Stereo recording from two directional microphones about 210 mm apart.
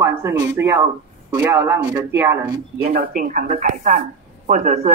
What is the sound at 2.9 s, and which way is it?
Speech, 45° right (ahead or behind).